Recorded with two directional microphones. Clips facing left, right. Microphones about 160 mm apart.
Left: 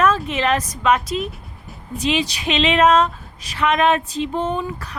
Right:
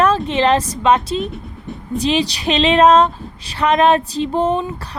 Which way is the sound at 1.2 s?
Centre (ahead or behind).